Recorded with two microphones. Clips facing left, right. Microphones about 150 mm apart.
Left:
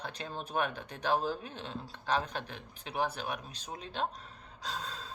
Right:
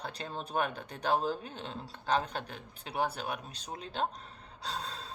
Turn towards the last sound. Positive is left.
turn(degrees=-35)  # may be behind; listen again after turning